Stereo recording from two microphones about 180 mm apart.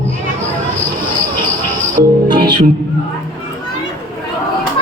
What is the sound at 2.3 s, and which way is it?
Speech, 25° right (ahead or behind).